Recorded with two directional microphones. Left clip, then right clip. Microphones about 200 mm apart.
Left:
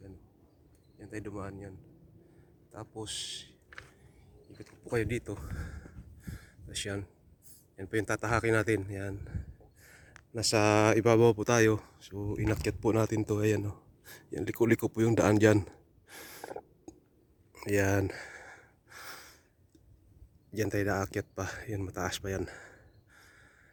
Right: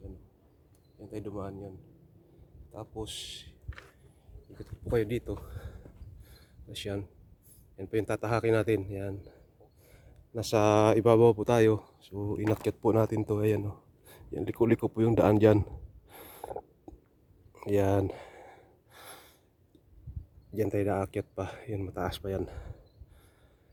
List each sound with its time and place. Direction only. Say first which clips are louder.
0.9 s speech: right 2 dB; centre (ahead or behind)
2.7 s speech: right 1 dB; 5° right (ahead or behind)
4.9 s a sound: right 3 dB; 5° right (ahead or behind)
7.8 s speech: right 1 dB; centre (ahead or behind)
9.8 s a sound: left 4 dB; centre (ahead or behind)
10.3 s speech: right 1 dB; centre (ahead or behind)
17.5 s gasp: right 2 dB; 5° right (ahead or behind)
20.5 s speech: right 2 dB; 5° right (ahead or behind)